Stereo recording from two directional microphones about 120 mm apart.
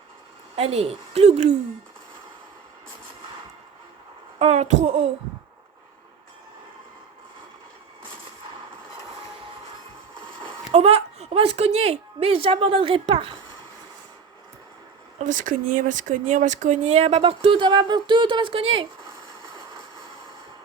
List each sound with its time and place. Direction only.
0.5 s speech: 55° right (ahead or behind)
4.4 s speech: 65° right (ahead or behind)
10.7 s speech: 55° right (ahead or behind)
15.2 s speech: 90° right; by 18.9 s 50° right (ahead or behind)